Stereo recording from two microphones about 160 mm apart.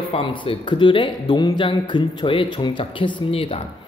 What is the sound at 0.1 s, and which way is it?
A man's voice, 30° left (ahead or behind).